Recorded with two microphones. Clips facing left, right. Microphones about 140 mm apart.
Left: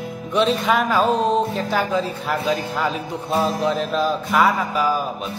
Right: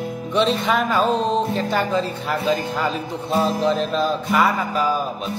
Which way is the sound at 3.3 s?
30° right (ahead or behind).